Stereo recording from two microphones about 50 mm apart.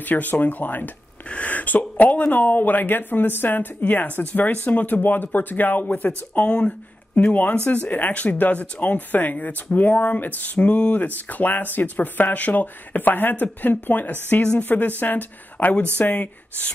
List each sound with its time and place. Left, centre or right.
0.0 s speech: left
6.4 s speech: left
11.1 s speech: left